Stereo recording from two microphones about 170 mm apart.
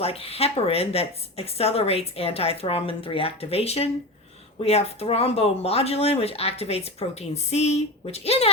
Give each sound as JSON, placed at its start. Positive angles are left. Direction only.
{"t": 0.0, "sound": "speech", "side_deg": 35}